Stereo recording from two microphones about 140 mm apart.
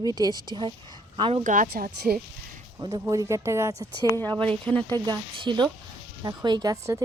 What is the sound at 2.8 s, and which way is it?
Speech, 30° right (ahead or behind).